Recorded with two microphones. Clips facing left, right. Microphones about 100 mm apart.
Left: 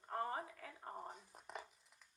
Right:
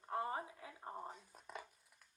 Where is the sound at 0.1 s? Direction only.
5° right (ahead or behind).